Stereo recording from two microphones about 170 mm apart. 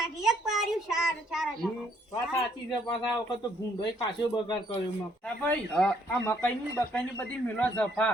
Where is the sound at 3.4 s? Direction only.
25° left (ahead or behind).